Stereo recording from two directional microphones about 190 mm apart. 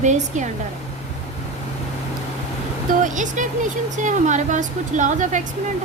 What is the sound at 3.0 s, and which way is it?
Speech, 40° right (ahead or behind).